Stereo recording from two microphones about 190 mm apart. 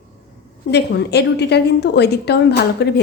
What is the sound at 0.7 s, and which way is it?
A woman's voice, 60° left (ahead or behind).